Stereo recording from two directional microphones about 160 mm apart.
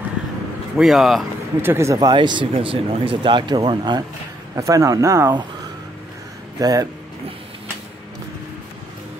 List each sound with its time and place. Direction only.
0.7 s speech: centre (ahead or behind)
1.6 s speech: 15° right (ahead or behind)
6.6 s speech: 20° right (ahead or behind)